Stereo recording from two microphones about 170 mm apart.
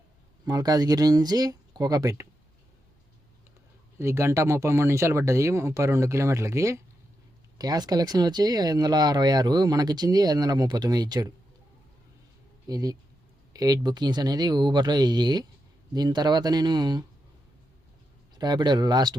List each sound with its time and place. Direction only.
0.4 s speech: 20° right (ahead or behind)
3.9 s speech: 15° right (ahead or behind)
12.6 s speech: 20° right (ahead or behind)
18.3 s speech: 25° right (ahead or behind)